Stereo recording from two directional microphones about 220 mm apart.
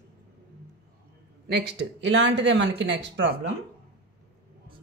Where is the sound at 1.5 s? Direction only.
50° right (ahead or behind).